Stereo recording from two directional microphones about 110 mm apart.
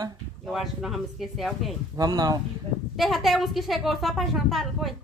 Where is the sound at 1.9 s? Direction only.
35° right (ahead or behind).